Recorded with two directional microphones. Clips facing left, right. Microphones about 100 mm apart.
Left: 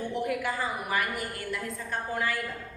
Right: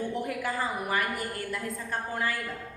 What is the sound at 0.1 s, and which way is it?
A woman's voice, 40° right (ahead or behind).